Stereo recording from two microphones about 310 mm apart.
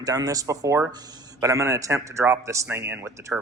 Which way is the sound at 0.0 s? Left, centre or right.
Centre.